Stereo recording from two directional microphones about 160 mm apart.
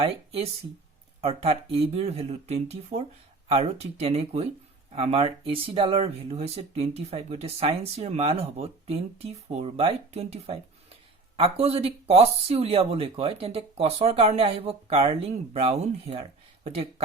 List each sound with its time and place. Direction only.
0.0 s speech: 40° right (ahead or behind)